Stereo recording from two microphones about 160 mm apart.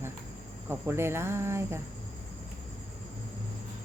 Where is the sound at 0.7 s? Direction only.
15° right (ahead or behind).